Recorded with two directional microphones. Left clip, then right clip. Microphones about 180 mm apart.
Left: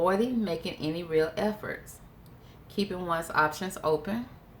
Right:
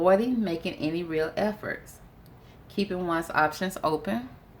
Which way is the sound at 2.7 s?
40° right (ahead or behind).